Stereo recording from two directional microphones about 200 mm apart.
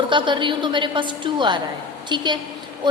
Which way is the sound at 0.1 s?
25° right (ahead or behind).